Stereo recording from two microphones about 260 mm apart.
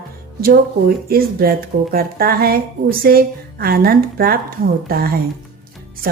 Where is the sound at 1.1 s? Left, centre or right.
Right.